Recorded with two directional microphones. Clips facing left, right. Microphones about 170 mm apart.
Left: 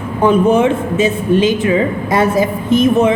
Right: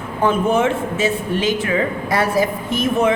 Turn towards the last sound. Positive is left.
turn(degrees=20)  # may be behind; listen again after turning